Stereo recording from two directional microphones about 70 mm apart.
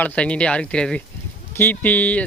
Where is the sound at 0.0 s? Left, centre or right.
Centre.